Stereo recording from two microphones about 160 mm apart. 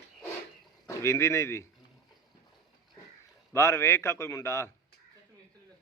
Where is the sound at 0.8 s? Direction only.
15° left (ahead or behind).